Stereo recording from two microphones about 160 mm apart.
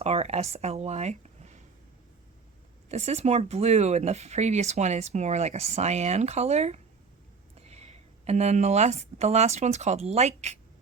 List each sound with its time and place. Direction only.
0.0 s a sound: 40° right (ahead or behind)
0.5 s speech: 40° right (ahead or behind)
2.9 s speech: 45° right (ahead or behind)